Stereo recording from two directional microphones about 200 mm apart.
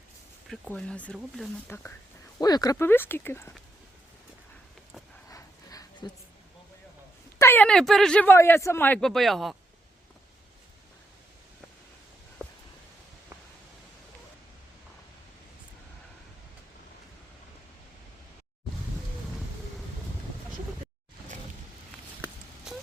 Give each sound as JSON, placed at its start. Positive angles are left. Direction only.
{"t": 0.4, "sound": "speech", "side_deg": 0}
{"t": 5.3, "sound": "a sound", "side_deg": 20}
{"t": 7.3, "sound": "speech", "side_deg": 10}